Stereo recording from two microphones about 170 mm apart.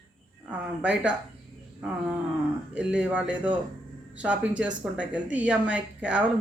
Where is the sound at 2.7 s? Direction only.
5° right (ahead or behind).